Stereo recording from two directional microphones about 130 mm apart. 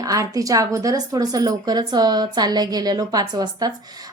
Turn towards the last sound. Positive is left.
turn(degrees=-30)  # may be behind; listen again after turning